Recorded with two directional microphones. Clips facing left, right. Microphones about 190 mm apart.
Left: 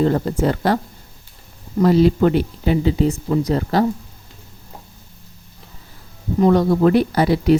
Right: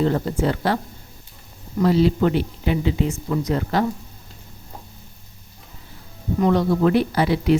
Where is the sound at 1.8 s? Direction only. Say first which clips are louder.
Left 4 dB; 45° left (ahead or behind).